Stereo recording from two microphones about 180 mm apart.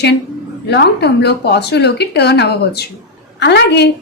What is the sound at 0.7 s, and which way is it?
A woman's voice, 70° left (ahead or behind).